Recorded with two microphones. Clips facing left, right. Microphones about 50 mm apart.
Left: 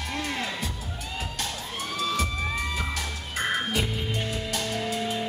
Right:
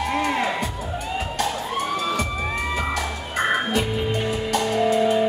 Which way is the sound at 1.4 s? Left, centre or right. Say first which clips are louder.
Right 9 dB; centre.